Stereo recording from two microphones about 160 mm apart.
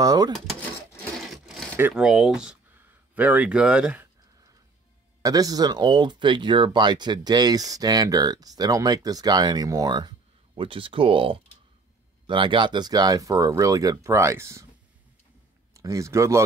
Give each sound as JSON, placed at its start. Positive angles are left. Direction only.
{"t": 0.0, "sound": "speech", "side_deg": -25}
{"t": 0.3, "sound": "speech", "side_deg": 5}
{"t": 1.2, "sound": "a sound", "side_deg": 0}
{"t": 1.8, "sound": "speech", "side_deg": -10}
{"t": 5.2, "sound": "speech", "side_deg": -20}
{"t": 15.7, "sound": "speech", "side_deg": -20}